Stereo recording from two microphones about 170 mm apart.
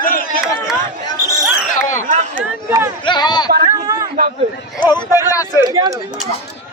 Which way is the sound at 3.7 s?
20° right (ahead or behind).